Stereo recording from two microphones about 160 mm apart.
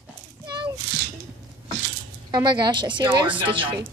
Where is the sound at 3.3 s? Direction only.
30° right (ahead or behind).